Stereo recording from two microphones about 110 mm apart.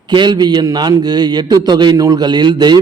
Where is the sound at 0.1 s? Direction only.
45° right (ahead or behind).